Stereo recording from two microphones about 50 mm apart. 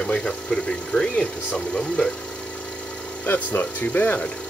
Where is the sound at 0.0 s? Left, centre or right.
Centre.